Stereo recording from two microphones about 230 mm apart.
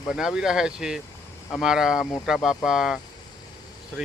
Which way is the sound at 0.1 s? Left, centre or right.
Centre.